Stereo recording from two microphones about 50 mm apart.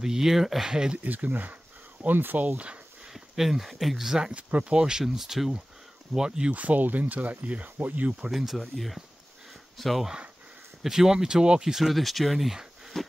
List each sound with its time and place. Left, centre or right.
0.0 s speech: centre
0.9 s speech: right
3.1 s speech: centre; by 4.6 s right
4.6 s speech: centre
6.5 s speech: right
8.3 s speech: centre
11.6 s speech: centre